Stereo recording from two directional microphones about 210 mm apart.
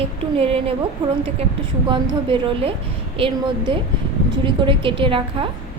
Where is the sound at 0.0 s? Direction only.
25° right (ahead or behind).